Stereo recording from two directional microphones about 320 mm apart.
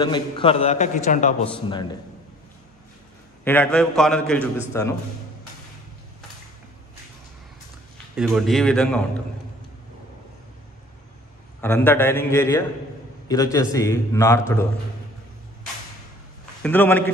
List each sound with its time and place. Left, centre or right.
0.0 s a man's voice: centre
3.4 s a man's voice: centre
8.2 s a man's voice: centre
11.6 s a man's voice: centre
16.6 s a man's voice: centre